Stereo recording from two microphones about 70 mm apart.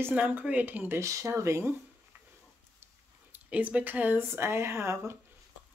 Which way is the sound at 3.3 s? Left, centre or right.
Right.